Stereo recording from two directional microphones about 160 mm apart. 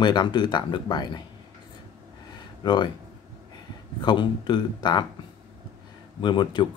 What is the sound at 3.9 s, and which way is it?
Speech, 30° left (ahead or behind).